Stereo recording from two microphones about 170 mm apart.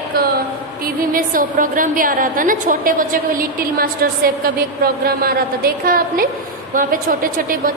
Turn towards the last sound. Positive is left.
turn(degrees=-55)  # may be behind; listen again after turning